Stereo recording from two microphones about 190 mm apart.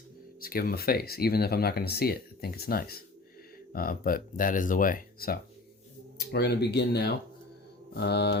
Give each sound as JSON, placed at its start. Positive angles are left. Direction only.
{"t": 0.3, "sound": "speech", "side_deg": 50}